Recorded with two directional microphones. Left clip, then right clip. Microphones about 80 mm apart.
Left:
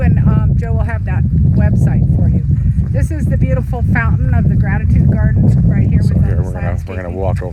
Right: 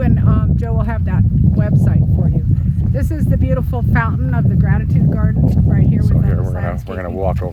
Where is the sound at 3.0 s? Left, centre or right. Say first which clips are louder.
Even; left.